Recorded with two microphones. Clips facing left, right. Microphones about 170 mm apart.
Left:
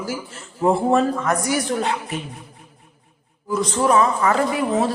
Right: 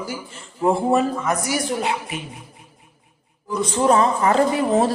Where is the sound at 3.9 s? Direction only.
30° right (ahead or behind).